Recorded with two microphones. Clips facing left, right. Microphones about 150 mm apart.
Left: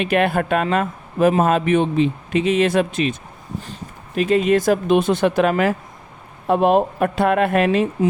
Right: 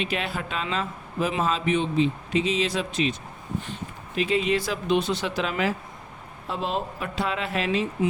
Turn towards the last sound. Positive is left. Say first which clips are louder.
# left 9 dB
turn(degrees=55)  # may be behind; listen again after turning